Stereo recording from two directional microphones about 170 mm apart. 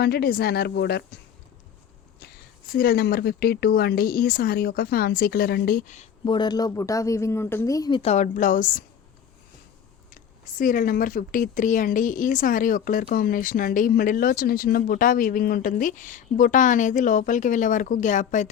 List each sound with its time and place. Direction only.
0.0 s speech: 65° left (ahead or behind)
2.7 s speech: 65° left (ahead or behind)
6.2 s speech: 25° left (ahead or behind)
8.1 s speech: 45° left (ahead or behind)
10.1 s speech: 55° left (ahead or behind)